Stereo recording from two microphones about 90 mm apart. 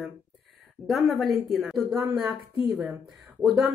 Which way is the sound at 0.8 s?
Centre (ahead or behind).